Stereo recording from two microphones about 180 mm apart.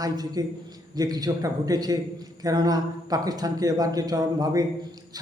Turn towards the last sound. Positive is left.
turn(degrees=-20)  # may be behind; listen again after turning